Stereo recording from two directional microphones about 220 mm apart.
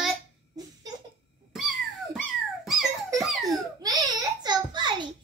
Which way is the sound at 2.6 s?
Centre (ahead or behind).